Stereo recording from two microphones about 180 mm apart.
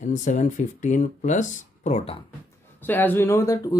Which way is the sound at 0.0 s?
40° left (ahead or behind).